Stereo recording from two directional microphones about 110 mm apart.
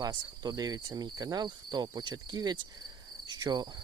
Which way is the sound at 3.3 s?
40° right (ahead or behind).